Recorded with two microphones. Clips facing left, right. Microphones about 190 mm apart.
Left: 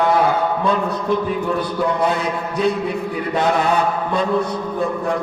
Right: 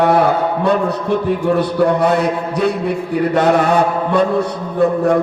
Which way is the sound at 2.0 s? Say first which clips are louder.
Right 5 dB; 70° right (ahead or behind).